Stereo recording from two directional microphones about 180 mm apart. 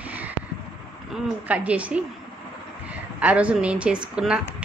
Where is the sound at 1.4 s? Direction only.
5° right (ahead or behind).